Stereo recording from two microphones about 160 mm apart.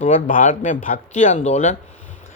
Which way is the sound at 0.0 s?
55° left (ahead or behind).